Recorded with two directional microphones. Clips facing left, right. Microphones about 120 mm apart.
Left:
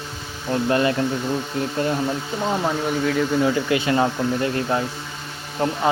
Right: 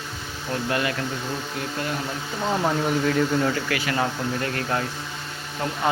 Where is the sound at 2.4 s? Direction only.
5° left (ahead or behind).